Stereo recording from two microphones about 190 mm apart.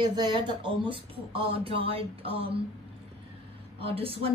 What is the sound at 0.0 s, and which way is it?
Speech, 25° right (ahead or behind).